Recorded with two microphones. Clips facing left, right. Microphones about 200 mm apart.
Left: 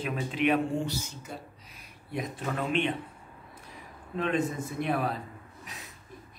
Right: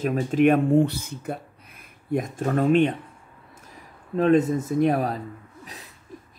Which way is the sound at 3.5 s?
40° right (ahead or behind).